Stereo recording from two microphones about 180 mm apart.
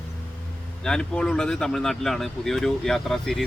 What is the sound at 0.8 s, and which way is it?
Speech, 5° left (ahead or behind).